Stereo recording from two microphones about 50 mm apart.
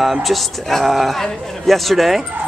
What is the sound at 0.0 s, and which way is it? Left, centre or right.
Speech, centre.